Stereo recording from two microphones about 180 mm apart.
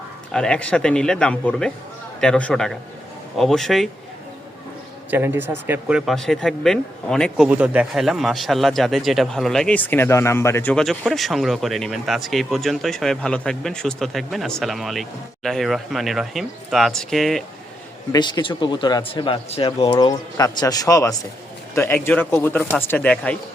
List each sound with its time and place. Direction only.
0.3 s a man's voice: 5° left (ahead or behind)
5.1 s speech: 10° right (ahead or behind)
6.1 s a man's voice: centre (ahead or behind)
18.1 s a man's voice: 25° left (ahead or behind); by 23.4 s 5° left (ahead or behind)